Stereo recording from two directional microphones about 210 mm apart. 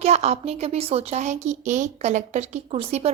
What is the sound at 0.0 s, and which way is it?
A woman's voice, 30° right (ahead or behind).